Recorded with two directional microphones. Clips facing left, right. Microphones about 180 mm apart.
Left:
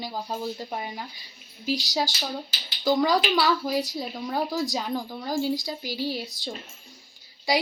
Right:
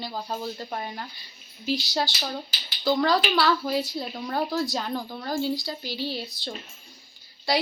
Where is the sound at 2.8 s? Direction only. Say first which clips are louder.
Left 1 dB; 15° left (ahead or behind).